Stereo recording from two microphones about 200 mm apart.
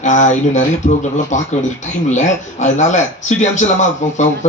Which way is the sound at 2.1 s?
35° left (ahead or behind).